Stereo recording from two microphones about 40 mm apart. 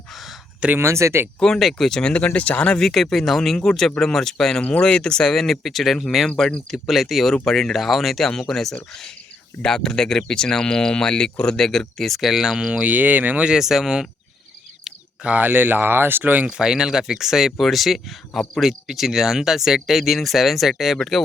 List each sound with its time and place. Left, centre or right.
0.1 s a sound: centre
0.8 s speech: right
1.4 s speech: centre
2.1 s speech: left
2.7 s speech: centre
4.6 s speech: left; by 6.2 s centre
6.2 s speech: centre
12.5 s speech: right
12.9 s speech: right
13.6 s speech: centre
14.9 s a sound: centre
15.4 s speech: right
16.6 s speech: centre